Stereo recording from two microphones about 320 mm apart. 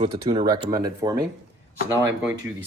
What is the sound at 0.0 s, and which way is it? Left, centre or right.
Speech, centre.